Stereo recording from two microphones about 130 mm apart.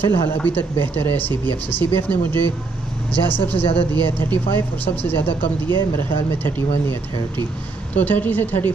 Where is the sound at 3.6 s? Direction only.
45° left (ahead or behind).